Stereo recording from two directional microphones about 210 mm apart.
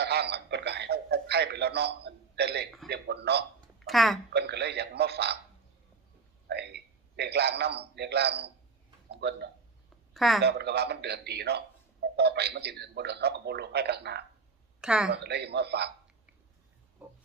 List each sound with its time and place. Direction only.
0.0 s radio: 50° right (ahead or behind)
2.9 s a man's voice: 50° right (ahead or behind)
3.8 s speech: centre (ahead or behind)
4.3 s a man's voice: 50° right (ahead or behind)
6.5 s a man's voice: 50° right (ahead or behind)
9.0 s a sound: 50° right (ahead or behind)
10.2 s speech: centre (ahead or behind)
10.4 s a man's voice: 50° right (ahead or behind)
14.8 s a woman's voice: 5° right (ahead or behind)
15.1 s a man's voice: 50° right (ahead or behind)
17.0 s pig: 5° right (ahead or behind)